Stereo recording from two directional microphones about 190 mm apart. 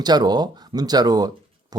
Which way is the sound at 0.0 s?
20° right (ahead or behind).